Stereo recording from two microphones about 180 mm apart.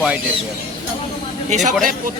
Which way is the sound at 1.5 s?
40° right (ahead or behind).